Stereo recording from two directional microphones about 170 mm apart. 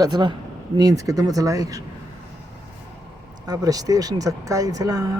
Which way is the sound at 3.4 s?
20° right (ahead or behind).